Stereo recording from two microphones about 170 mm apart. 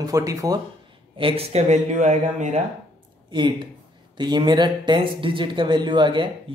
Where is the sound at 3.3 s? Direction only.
25° right (ahead or behind).